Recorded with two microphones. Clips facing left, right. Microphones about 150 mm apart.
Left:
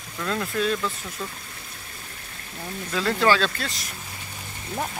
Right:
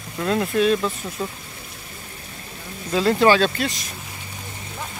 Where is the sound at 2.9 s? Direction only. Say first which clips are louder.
Right 5 dB; 25° right (ahead or behind).